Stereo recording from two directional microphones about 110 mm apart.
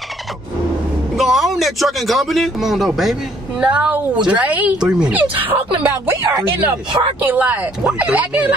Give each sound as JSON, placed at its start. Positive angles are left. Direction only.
{"t": 1.1, "sound": "speech", "side_deg": 0}
{"t": 3.6, "sound": "a woman's voice", "side_deg": -10}
{"t": 7.2, "sound": "a woman's voice", "side_deg": -15}